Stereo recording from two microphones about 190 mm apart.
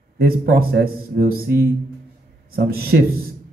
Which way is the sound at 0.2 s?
55° right (ahead or behind).